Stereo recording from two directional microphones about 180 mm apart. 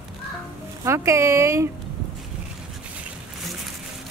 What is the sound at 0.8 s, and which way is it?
Speech, 15° right (ahead or behind).